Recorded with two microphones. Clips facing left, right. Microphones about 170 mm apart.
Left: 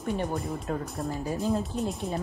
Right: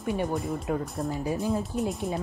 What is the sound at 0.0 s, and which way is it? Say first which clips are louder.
Speech: right 2 dB; 5° right (ahead or behind).